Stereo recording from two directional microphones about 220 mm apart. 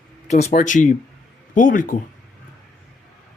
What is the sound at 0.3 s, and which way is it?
Speech, 30° left (ahead or behind).